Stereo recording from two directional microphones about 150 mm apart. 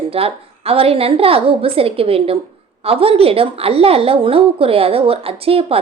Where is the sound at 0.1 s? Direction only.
40° right (ahead or behind).